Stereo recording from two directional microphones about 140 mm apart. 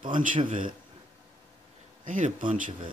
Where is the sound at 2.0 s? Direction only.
70° right (ahead or behind).